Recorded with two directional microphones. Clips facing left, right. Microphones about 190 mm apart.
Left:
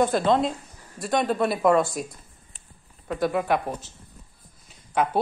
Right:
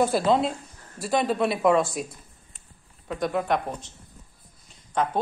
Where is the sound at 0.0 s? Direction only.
5° right (ahead or behind).